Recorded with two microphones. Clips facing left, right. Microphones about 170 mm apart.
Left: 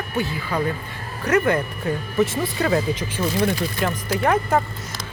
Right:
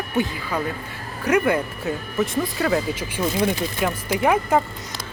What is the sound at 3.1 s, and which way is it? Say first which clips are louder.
Speech: right 1 dB; 15° right (ahead or behind).